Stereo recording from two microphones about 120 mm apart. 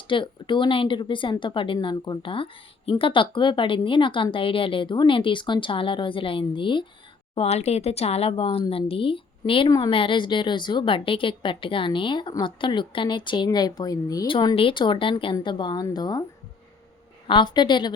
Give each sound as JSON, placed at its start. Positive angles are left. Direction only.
{"t": 0.1, "sound": "a woman's voice", "side_deg": 45}
{"t": 7.3, "sound": "a woman's voice", "side_deg": 60}
{"t": 14.3, "sound": "a woman's voice", "side_deg": 45}
{"t": 17.2, "sound": "speech", "side_deg": 40}